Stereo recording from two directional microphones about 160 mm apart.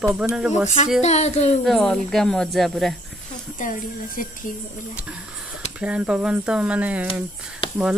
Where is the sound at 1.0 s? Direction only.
45° left (ahead or behind).